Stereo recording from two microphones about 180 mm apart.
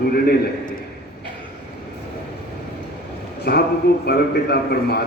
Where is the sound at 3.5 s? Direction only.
60° left (ahead or behind).